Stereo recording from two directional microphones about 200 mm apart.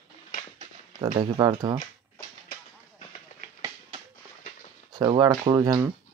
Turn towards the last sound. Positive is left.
turn(degrees=-20)  # may be behind; listen again after turning